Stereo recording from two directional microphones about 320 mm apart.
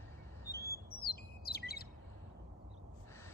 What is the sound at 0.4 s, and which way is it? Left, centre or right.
Bird, centre.